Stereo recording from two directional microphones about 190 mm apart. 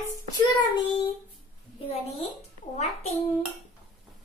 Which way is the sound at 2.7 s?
35° left (ahead or behind).